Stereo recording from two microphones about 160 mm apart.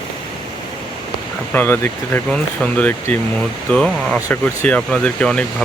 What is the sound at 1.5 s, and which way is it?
Speech, 15° left (ahead or behind).